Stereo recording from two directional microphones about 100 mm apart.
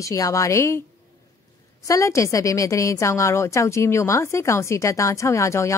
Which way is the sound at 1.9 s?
30° left (ahead or behind).